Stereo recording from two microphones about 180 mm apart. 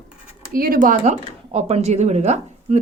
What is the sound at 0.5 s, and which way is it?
Speech, 55° right (ahead or behind).